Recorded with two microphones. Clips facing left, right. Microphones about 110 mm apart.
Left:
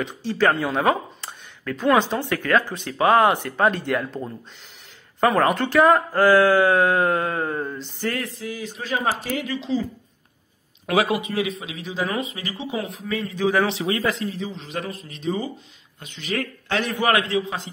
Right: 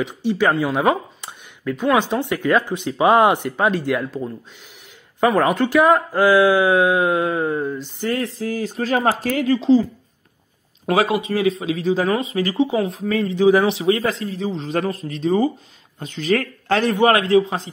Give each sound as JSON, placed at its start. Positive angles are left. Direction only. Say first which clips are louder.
{"t": 0.1, "sound": "speech", "louder": "even", "side_deg": -15}
{"t": 3.5, "sound": "speech", "louder": "right 2 dB", "side_deg": -5}
{"t": 8.0, "sound": "speech", "louder": "right 4 dB", "side_deg": -25}
{"t": 10.9, "sound": "speech", "louder": "right 3 dB", "side_deg": -30}
{"t": 13.3, "sound": "speech", "louder": "right 6 dB", "side_deg": -20}
{"t": 13.8, "sound": "speech", "louder": "right 4 dB", "side_deg": -30}